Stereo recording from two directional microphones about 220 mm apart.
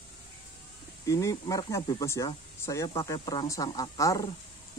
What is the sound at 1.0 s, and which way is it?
Speech, 15° left (ahead or behind).